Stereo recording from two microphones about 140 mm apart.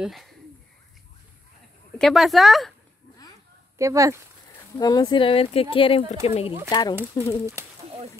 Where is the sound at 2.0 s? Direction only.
Centre (ahead or behind).